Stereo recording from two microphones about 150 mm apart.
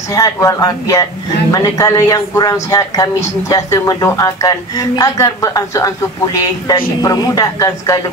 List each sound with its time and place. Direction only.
0.1 s speech: 20° left (ahead or behind)